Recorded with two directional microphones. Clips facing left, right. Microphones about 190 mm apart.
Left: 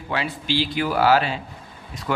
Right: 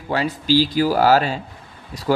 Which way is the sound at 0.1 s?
40° right (ahead or behind).